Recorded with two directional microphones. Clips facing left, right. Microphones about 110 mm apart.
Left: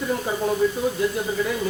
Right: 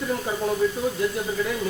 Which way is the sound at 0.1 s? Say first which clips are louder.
Left 2 dB; 20° left (ahead or behind).